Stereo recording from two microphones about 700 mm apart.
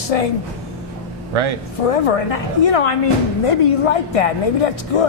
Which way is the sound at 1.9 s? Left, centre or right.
Left.